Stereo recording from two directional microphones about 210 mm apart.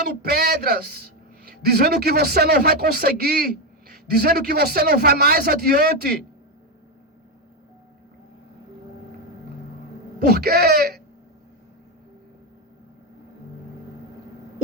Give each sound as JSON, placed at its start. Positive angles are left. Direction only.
{"t": 0.0, "sound": "a man's voice", "side_deg": -45}
{"t": 10.2, "sound": "speech", "side_deg": -50}